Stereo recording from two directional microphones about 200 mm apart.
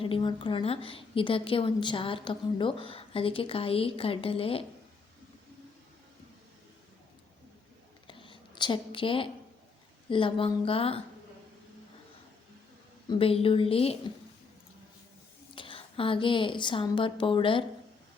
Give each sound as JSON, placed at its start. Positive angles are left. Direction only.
{"t": 0.0, "sound": "a woman's voice", "side_deg": 25}
{"t": 8.0, "sound": "a sound", "side_deg": 25}
{"t": 10.1, "sound": "a woman's voice", "side_deg": 25}
{"t": 13.1, "sound": "a woman's voice", "side_deg": 30}
{"t": 15.5, "sound": "a woman's voice", "side_deg": 25}